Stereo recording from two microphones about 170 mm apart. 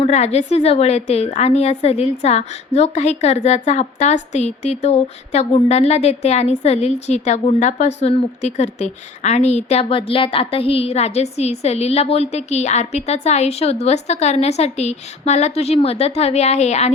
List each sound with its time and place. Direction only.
0.0 s a woman's voice: 40° left (ahead or behind)